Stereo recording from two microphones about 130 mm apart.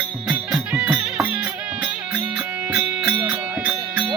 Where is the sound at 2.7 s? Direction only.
10° right (ahead or behind).